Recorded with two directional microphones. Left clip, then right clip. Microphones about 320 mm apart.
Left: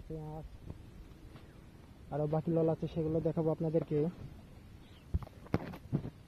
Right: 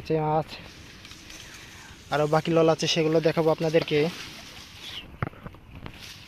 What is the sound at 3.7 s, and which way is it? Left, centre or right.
Speech, centre.